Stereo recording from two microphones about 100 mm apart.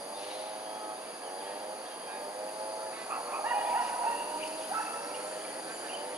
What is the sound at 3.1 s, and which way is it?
Dog, 15° right (ahead or behind).